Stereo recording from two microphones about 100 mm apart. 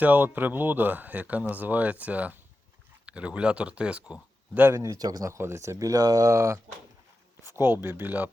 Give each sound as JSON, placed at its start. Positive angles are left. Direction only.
{"t": 0.0, "sound": "speech", "side_deg": -20}
{"t": 4.8, "sound": "speech", "side_deg": -35}